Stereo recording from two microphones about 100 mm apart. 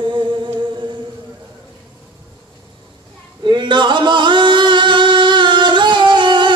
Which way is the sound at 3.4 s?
50° right (ahead or behind).